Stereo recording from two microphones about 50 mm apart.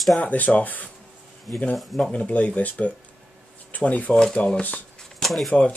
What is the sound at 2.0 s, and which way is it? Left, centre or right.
Speech, left.